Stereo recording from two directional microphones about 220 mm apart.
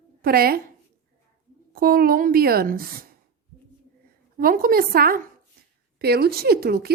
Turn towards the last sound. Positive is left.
turn(degrees=-45)  # may be behind; listen again after turning